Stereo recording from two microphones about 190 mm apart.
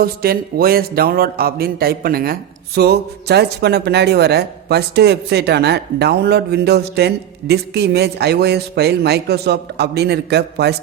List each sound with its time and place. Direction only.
0.0 s speech: 55° right (ahead or behind)